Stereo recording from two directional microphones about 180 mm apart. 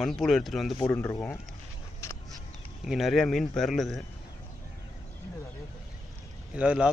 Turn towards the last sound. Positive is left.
turn(degrees=-5)  # may be behind; listen again after turning